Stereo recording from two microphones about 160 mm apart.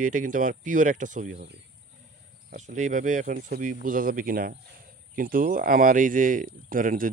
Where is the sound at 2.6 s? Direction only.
50° right (ahead or behind).